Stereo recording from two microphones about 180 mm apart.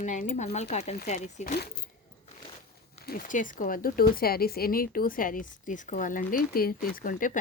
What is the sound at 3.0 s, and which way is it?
Speech, 50° left (ahead or behind).